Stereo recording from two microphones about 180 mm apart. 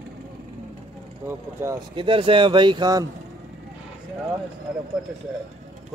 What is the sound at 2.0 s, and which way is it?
Speech, 30° right (ahead or behind).